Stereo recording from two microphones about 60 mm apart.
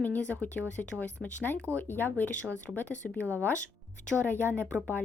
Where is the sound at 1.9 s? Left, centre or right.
Left.